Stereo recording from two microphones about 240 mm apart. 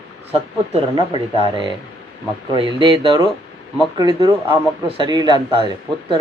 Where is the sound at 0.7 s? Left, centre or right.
Right.